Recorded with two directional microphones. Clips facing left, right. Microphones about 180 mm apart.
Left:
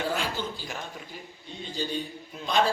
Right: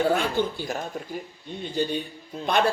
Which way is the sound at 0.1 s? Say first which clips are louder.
Right 7 dB; 60° right (ahead or behind).